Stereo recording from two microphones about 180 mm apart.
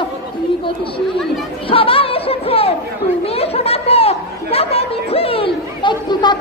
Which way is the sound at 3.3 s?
35° left (ahead or behind).